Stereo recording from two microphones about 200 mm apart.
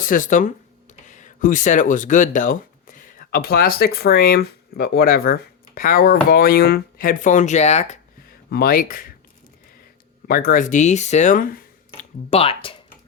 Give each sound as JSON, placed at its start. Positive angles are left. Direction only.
{"t": 0.0, "sound": "speech", "side_deg": 40}
{"t": 8.4, "sound": "speech", "side_deg": 50}
{"t": 10.2, "sound": "speech", "side_deg": 45}
{"t": 12.3, "sound": "speech", "side_deg": 30}